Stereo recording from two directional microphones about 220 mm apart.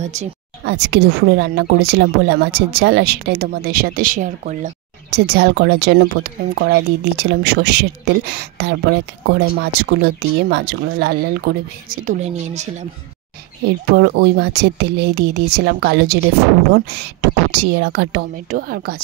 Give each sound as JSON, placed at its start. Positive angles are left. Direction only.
{"t": 0.0, "sound": "speech", "side_deg": -30}
{"t": 0.7, "sound": "speech", "side_deg": -50}
{"t": 5.1, "sound": "speech", "side_deg": -45}
{"t": 13.8, "sound": "speech", "side_deg": -50}